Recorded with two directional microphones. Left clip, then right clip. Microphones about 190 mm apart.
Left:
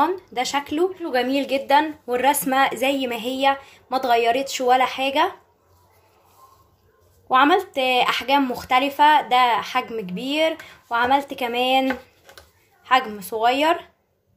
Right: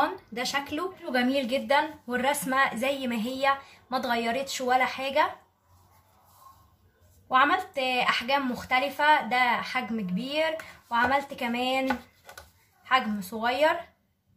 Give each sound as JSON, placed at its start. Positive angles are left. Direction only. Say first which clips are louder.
{"t": 0.3, "sound": "a woman's voice", "louder": "left 7 dB", "side_deg": 40}
{"t": 7.2, "sound": "speech", "louder": "left 6 dB", "side_deg": 40}
{"t": 12.8, "sound": "speech", "louder": "left 6 dB", "side_deg": 45}